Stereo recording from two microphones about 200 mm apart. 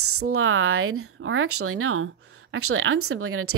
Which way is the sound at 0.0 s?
90° right.